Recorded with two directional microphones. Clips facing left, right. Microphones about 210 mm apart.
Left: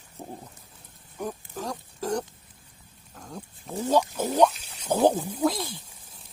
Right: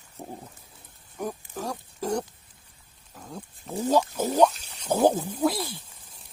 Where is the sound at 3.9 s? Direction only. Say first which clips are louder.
Even; 10° right (ahead or behind).